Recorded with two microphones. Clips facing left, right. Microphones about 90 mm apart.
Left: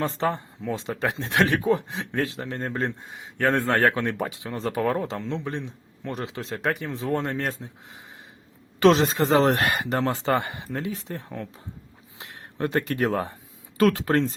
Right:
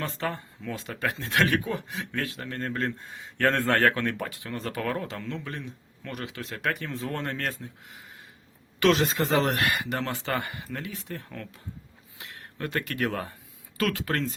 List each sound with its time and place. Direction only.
0.0 s speech: 25° left (ahead or behind)
6.7 s speech: 20° left (ahead or behind)